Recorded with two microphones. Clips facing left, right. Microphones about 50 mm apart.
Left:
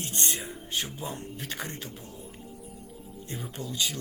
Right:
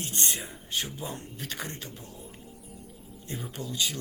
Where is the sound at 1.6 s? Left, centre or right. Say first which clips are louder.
Even; centre.